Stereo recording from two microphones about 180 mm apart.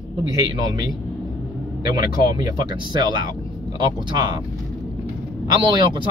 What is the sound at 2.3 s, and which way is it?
Speech, 25° right (ahead or behind).